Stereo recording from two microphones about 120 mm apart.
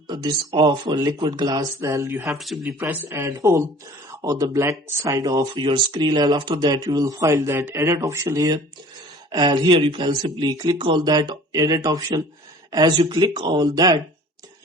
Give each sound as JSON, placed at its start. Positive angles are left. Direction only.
{"t": 0.1, "sound": "speech", "side_deg": -35}